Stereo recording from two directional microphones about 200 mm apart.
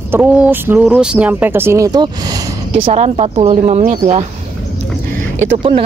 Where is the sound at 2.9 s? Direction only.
30° right (ahead or behind).